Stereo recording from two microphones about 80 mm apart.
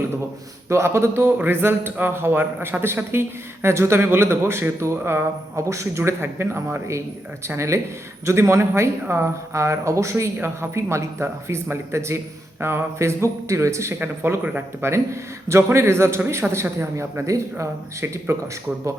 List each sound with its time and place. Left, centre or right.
0.7 s speech: right
14.8 s speech: right